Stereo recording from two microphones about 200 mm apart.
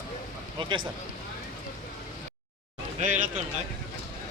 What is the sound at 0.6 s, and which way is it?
Speech, 25° right (ahead or behind).